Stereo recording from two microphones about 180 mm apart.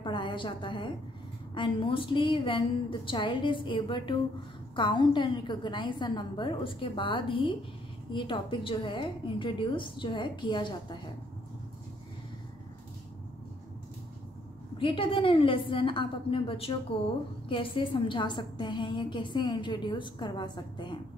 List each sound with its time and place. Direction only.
0.0 s a sound: 25° left (ahead or behind)
1.5 s a woman's voice: 30° left (ahead or behind)
14.8 s a woman's voice: 30° left (ahead or behind)